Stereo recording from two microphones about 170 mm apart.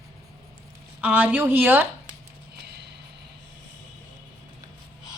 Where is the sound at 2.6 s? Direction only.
80° right.